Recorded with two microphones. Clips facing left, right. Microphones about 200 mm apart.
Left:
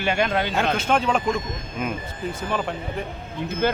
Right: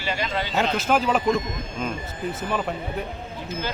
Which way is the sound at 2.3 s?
5° right (ahead or behind).